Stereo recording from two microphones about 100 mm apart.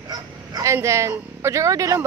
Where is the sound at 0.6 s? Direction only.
30° right (ahead or behind).